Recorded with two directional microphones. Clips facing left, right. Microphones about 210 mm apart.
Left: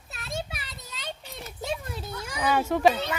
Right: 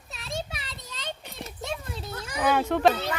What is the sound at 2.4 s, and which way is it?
Speech, centre (ahead or behind).